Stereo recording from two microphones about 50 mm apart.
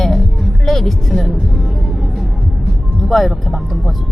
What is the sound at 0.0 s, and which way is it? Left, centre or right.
Music, centre.